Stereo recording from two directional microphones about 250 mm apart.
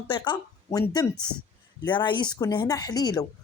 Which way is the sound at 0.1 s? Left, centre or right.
Centre.